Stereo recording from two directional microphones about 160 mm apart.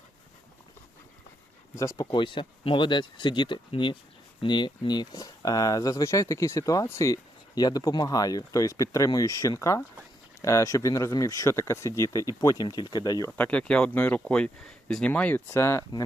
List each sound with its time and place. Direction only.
1.7 s speech: 20° left (ahead or behind)
13.3 s speech: 10° left (ahead or behind)